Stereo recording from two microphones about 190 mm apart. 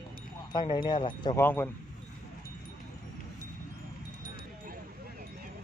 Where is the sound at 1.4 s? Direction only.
10° left (ahead or behind).